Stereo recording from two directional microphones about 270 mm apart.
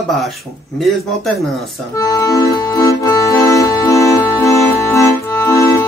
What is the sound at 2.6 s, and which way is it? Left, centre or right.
Accordion, centre.